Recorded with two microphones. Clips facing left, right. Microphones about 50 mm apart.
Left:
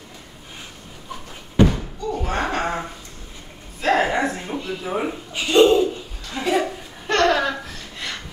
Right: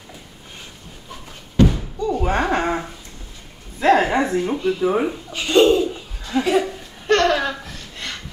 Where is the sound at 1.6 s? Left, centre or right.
Left.